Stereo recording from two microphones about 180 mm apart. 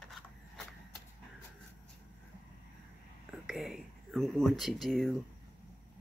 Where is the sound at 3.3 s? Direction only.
Centre (ahead or behind).